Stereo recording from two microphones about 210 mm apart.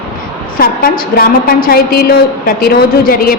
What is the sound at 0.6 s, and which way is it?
A woman's voice, 45° left (ahead or behind).